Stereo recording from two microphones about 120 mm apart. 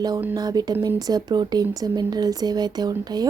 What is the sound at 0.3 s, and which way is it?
Speech, 30° right (ahead or behind).